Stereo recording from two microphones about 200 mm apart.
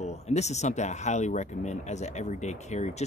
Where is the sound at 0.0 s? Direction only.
35° left (ahead or behind).